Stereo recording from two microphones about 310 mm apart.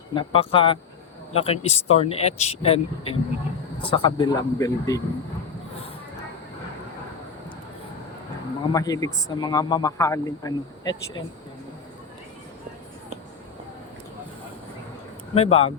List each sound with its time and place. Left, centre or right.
0.1 s speech: centre
8.7 s speech: centre
15.4 s speech: centre